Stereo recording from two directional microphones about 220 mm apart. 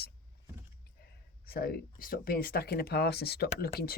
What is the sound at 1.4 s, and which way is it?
Speech, 45° left (ahead or behind).